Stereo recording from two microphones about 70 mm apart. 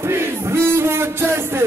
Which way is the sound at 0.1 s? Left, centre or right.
Right.